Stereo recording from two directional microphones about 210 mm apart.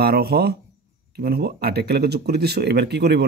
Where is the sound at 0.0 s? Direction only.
50° right (ahead or behind).